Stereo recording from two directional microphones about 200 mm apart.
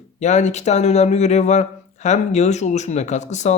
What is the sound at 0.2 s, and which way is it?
Speech, 35° left (ahead or behind).